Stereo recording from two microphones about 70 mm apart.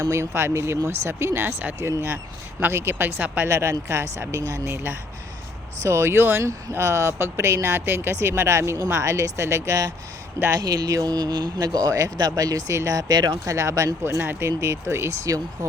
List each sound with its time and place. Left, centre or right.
0.0 s speech: right
6.4 s speech: right
14.2 s speech: right
14.4 s speech: right